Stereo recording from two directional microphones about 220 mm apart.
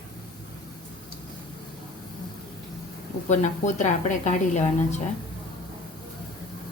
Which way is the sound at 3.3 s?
35° left (ahead or behind).